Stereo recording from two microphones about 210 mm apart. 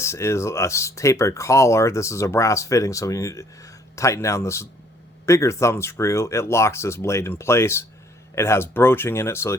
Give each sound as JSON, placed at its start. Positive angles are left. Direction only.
{"t": 0.0, "sound": "speech", "side_deg": 15}